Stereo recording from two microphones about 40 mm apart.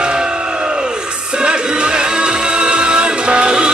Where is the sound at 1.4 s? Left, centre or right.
Right.